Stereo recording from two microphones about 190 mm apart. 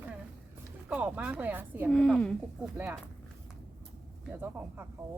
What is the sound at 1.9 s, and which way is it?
Speech, 5° left (ahead or behind).